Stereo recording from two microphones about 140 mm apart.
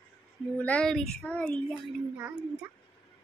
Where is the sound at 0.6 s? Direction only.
10° left (ahead or behind).